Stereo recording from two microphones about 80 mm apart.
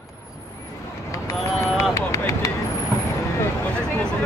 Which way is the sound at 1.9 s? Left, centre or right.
Left.